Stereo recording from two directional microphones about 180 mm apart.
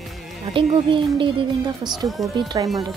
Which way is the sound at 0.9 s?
30° right (ahead or behind).